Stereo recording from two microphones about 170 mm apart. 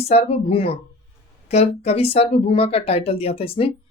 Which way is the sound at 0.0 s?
35° left (ahead or behind).